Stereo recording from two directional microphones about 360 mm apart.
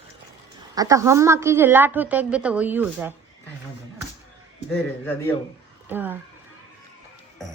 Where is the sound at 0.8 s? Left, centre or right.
Centre.